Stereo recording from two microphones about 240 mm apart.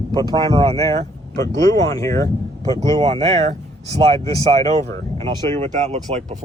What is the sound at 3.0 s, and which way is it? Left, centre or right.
Speech, right.